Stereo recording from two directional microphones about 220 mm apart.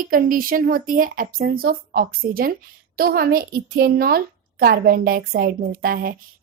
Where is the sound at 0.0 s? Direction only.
40° right (ahead or behind).